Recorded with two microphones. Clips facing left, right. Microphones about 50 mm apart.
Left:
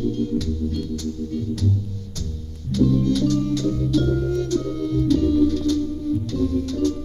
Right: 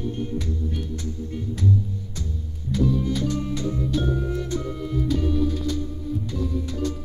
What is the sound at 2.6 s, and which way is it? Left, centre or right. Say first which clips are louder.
Music: left 4 dB; centre.